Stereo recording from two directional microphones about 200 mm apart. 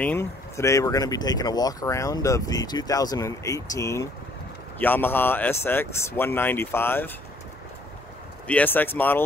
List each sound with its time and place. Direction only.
0.0 s speech: 10° left (ahead or behind)
8.5 s speech: 10° left (ahead or behind)